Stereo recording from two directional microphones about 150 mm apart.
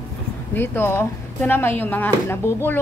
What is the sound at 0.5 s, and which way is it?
A woman's voice, 15° left (ahead or behind).